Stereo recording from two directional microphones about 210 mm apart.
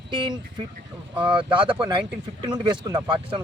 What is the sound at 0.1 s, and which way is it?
Speech, 20° right (ahead or behind).